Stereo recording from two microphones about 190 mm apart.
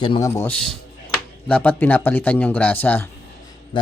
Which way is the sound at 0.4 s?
5° left (ahead or behind).